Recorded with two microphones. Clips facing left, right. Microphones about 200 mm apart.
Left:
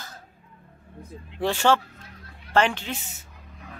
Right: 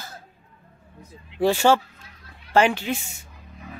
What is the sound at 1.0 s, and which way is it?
Vehicle, 60° left (ahead or behind).